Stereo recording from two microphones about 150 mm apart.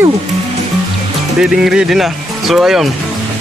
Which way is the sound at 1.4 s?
5° right (ahead or behind).